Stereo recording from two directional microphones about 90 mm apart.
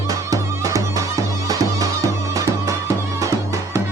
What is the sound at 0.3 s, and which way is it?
Music, 40° right (ahead or behind).